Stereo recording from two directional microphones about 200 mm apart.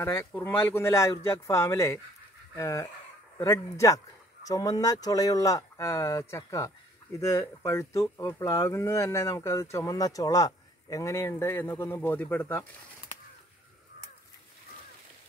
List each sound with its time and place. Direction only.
0.0 s speech: 10° left (ahead or behind)